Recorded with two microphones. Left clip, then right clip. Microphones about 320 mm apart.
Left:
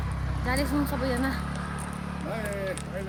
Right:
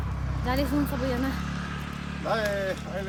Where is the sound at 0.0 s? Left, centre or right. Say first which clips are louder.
Even; left.